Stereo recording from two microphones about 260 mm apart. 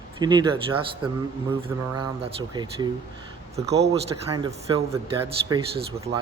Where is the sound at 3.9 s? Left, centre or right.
Centre.